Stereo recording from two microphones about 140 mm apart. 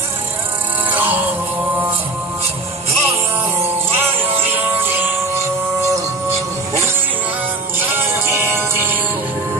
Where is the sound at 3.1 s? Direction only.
20° right (ahead or behind).